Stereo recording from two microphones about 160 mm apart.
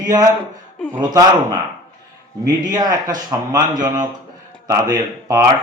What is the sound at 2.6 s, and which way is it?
Speech, 25° right (ahead or behind).